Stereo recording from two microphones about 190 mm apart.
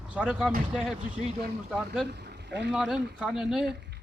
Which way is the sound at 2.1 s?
60° right (ahead or behind).